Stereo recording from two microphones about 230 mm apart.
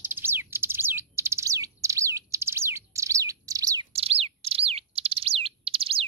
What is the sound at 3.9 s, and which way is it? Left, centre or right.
Bird, right.